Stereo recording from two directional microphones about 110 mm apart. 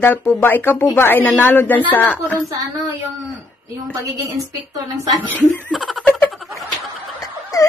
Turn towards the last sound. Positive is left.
turn(degrees=35)  # may be behind; listen again after turning